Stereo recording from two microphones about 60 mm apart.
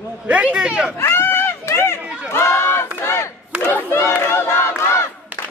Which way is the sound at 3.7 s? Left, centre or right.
Left.